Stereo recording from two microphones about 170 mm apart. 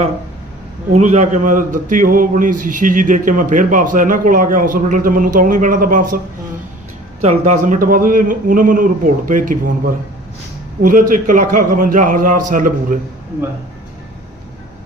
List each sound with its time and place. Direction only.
0.9 s a man's voice: 45° right (ahead or behind)
7.2 s a man's voice: 45° right (ahead or behind)